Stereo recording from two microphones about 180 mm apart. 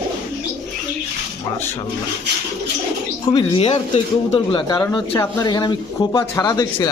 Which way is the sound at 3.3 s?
30° left (ahead or behind).